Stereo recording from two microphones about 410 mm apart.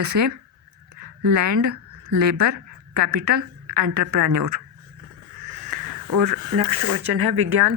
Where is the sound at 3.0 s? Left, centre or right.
Right.